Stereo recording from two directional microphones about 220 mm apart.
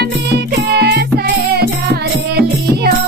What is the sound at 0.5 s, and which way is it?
Music, 50° right (ahead or behind).